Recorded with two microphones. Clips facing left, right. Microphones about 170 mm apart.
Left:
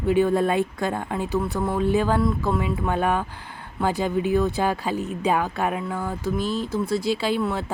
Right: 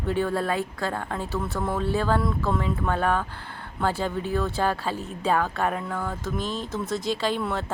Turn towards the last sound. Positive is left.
turn(degrees=10)  # may be behind; listen again after turning